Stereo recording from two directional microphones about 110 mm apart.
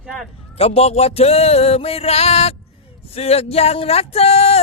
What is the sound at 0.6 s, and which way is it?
Speech, 70° left (ahead or behind).